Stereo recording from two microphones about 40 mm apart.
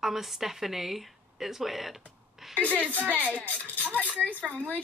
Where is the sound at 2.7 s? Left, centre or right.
Right.